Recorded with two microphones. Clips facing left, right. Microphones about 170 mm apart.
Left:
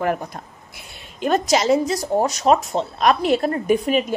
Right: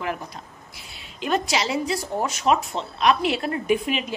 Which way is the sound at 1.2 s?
45° left (ahead or behind).